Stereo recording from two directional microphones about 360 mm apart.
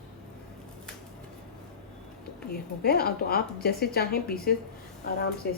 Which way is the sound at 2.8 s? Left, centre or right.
Left.